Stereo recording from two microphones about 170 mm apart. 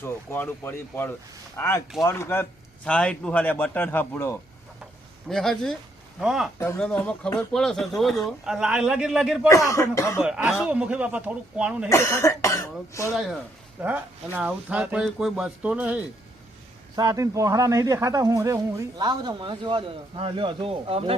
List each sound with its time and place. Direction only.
0.0 s speech: 10° left (ahead or behind)
5.3 s speech: centre (ahead or behind)
9.5 s speech: 15° left (ahead or behind)
10.2 s speech: 5° right (ahead or behind)
11.9 s speech: 15° left (ahead or behind)
13.1 s speech: 5° right (ahead or behind)
16.9 s a man's voice: 20° right (ahead or behind)